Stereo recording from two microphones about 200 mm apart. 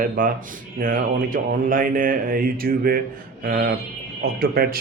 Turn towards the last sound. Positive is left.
turn(degrees=-50)  # may be behind; listen again after turning